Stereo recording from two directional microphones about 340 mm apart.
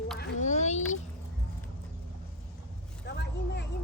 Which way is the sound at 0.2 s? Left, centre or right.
Left.